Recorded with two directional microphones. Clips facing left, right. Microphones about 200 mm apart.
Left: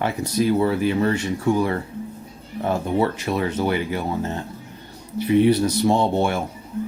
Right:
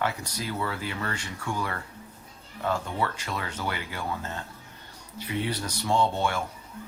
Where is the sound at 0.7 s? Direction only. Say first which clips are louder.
Left 13 dB; 20° left (ahead or behind).